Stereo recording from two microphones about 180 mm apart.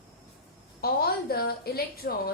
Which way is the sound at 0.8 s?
60° left (ahead or behind).